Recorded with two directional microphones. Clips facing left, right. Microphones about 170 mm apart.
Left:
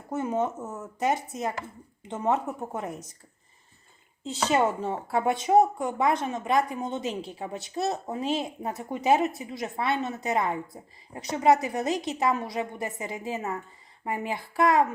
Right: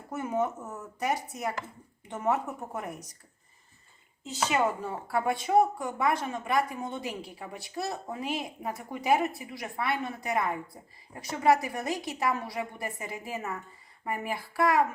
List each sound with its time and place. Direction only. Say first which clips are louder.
0.1 s speech: left 2 dB; 20° left (ahead or behind)
4.4 s speech: left 4 dB; 30° left (ahead or behind)